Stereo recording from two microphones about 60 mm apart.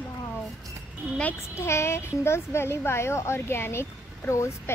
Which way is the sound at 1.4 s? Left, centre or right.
Left.